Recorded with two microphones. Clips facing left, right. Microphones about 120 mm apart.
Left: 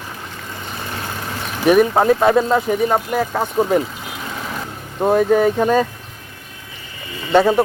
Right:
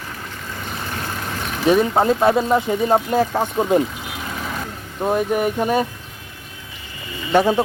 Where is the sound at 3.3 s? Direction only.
10° left (ahead or behind).